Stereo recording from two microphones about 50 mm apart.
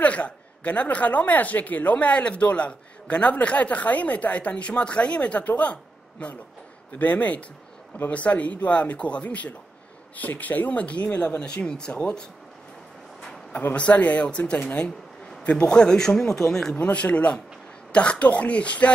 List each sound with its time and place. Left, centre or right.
0.0 s a woman's voice: left
13.5 s a man's voice: left
15.4 s speech: centre
16.8 s a woman's voice: left